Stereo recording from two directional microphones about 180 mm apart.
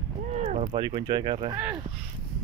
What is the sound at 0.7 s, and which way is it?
Speech, 25° right (ahead or behind).